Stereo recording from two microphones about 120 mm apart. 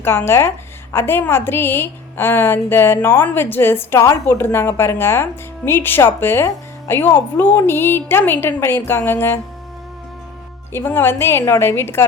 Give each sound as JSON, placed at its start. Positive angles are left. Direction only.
{"t": 0.0, "sound": "a woman's voice", "side_deg": 20}
{"t": 10.7, "sound": "a woman's voice", "side_deg": 20}